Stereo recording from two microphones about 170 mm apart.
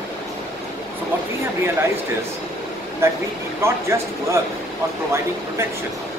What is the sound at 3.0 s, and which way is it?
Speech, 15° right (ahead or behind).